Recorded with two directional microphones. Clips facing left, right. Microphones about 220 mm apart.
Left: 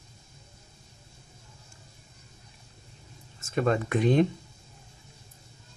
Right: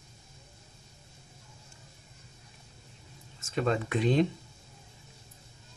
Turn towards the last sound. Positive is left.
turn(degrees=50)  # may be behind; listen again after turning